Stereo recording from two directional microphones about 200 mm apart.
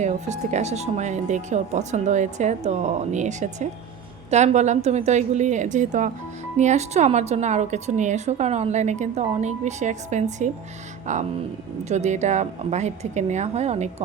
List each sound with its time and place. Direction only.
0.0 s a woman's voice: 35° right (ahead or behind)